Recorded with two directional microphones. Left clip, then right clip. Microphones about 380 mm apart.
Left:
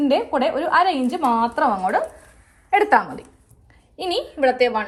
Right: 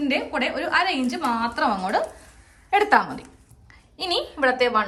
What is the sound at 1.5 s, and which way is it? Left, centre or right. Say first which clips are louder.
A woman's voice: left 3 dB; centre.